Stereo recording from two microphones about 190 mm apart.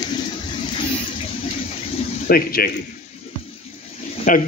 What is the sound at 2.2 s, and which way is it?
Speech, 50° left (ahead or behind).